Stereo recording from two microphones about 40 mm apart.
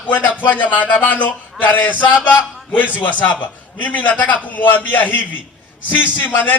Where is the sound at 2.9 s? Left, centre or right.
Left.